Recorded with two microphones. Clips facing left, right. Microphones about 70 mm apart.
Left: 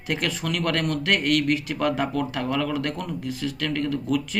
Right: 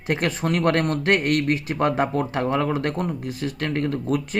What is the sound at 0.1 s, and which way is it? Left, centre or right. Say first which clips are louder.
Speech: right 4 dB; right.